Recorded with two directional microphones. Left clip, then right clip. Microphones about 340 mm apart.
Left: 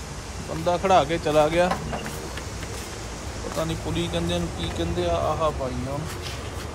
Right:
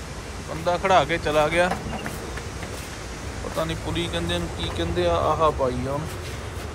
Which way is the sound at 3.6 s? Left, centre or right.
Centre.